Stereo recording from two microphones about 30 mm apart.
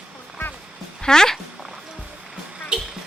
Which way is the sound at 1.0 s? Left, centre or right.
Left.